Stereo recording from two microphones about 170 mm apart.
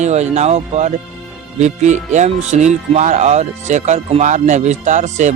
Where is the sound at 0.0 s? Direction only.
40° right (ahead or behind).